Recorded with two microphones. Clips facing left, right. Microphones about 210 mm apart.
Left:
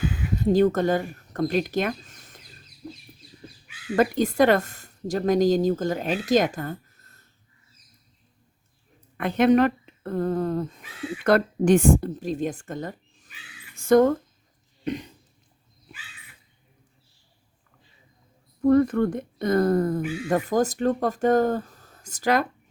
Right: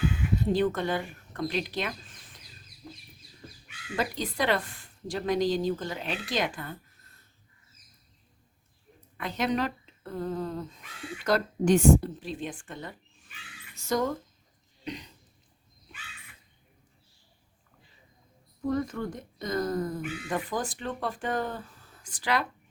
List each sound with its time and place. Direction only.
0.3 s speech: 45° left (ahead or behind)
3.9 s speech: 50° left (ahead or behind)
9.1 s speech: 55° left (ahead or behind)
13.7 s speech: 55° left (ahead or behind)
14.8 s cough: 50° left (ahead or behind)
18.6 s speech: 60° left (ahead or behind); by 22.4 s 45° left (ahead or behind)